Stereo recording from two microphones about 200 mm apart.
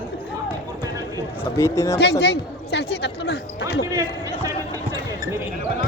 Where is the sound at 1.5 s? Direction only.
15° left (ahead or behind).